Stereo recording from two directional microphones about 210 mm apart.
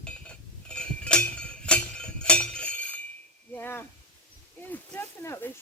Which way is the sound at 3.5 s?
10° left (ahead or behind).